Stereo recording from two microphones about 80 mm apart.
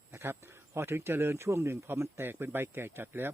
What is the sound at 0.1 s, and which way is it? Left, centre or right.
Speech, right.